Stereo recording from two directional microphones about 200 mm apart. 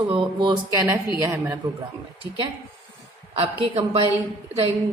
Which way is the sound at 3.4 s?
30° right (ahead or behind).